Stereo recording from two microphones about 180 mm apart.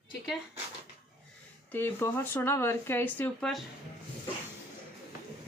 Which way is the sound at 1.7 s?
10° left (ahead or behind).